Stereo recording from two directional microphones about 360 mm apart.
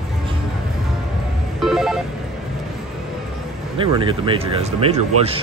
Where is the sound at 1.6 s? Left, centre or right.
Centre.